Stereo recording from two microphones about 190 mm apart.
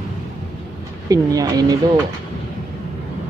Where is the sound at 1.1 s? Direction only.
20° right (ahead or behind).